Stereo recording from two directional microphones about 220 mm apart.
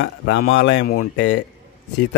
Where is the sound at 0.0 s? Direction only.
55° left (ahead or behind).